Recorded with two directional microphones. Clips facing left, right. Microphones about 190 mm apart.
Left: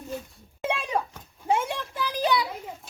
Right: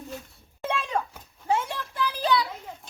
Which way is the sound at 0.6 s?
10° left (ahead or behind).